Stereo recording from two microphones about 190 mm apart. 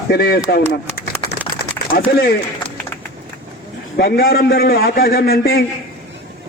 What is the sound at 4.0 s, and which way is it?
A man's voice, 55° left (ahead or behind).